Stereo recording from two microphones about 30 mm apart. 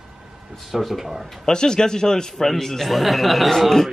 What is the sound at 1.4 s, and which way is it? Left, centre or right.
A man's voice, left.